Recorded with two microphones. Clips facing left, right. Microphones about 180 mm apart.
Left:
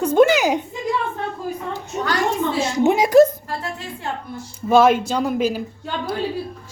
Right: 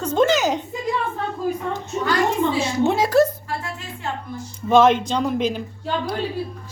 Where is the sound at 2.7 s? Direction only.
15° left (ahead or behind).